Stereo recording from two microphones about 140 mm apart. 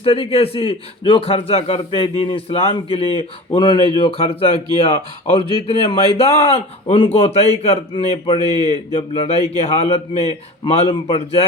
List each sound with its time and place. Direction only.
0.0 s a man's voice: 40° left (ahead or behind)